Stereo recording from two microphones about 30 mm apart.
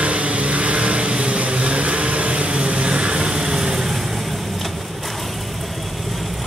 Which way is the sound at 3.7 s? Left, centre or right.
Centre.